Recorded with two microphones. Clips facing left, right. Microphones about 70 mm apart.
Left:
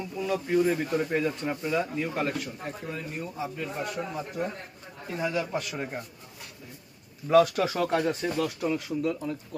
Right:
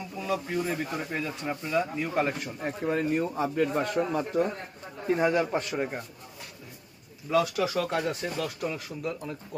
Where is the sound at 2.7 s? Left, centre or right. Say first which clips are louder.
Right 8 dB; right.